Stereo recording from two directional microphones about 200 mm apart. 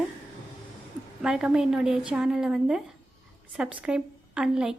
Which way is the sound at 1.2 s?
5° right (ahead or behind).